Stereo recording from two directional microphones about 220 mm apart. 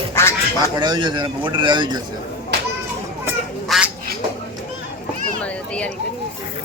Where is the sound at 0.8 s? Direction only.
20° right (ahead or behind).